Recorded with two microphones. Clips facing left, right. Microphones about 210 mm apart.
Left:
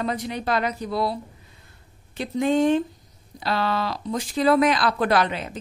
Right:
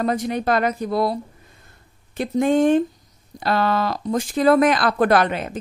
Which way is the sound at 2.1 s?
50° right (ahead or behind).